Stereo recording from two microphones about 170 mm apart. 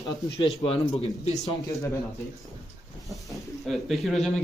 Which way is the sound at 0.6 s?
35° left (ahead or behind).